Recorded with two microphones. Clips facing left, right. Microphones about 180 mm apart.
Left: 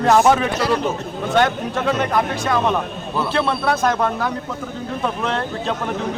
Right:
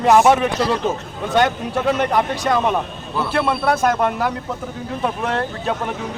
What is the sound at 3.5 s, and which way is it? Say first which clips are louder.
Speech: right 1 dB; 10° right (ahead or behind).